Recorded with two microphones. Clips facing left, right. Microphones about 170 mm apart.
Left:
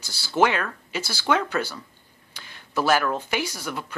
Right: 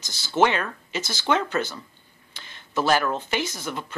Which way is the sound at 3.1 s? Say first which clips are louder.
Even; 10° left (ahead or behind).